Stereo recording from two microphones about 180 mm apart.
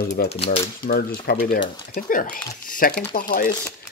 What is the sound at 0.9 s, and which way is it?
Speech, 55° left (ahead or behind).